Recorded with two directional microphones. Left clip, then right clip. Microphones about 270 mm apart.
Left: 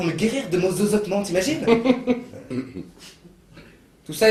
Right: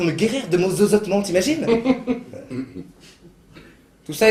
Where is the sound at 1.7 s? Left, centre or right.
Centre.